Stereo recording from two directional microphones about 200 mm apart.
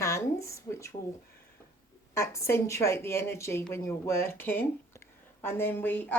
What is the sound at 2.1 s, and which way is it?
A woman's voice, 15° left (ahead or behind).